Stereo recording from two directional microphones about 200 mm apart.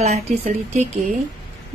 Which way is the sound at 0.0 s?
35° right (ahead or behind).